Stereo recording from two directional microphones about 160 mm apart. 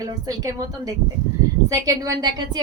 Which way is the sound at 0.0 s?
25° right (ahead or behind).